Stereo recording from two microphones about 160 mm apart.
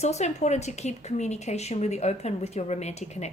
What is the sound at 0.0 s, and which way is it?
A woman's voice, 45° left (ahead or behind).